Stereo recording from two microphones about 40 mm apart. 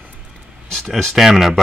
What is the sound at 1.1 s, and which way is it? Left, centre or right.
Speech, centre.